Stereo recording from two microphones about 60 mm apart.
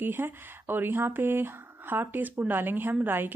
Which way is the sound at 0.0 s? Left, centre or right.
Right.